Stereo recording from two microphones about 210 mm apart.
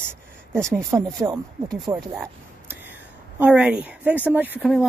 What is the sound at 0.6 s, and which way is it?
Speech, 15° right (ahead or behind).